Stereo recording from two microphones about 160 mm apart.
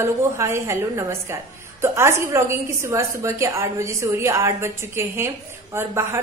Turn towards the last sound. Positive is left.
turn(degrees=-15)  # may be behind; listen again after turning